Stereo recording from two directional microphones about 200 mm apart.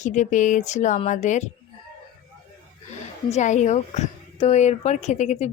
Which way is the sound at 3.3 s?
35° left (ahead or behind).